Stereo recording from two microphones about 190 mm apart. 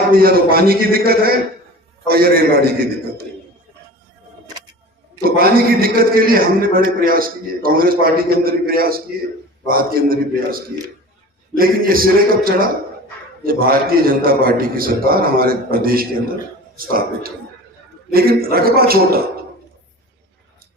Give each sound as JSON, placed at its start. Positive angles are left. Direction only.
{"t": 0.1, "sound": "a man's voice", "side_deg": -50}
{"t": 5.2, "sound": "a man's voice", "side_deg": -50}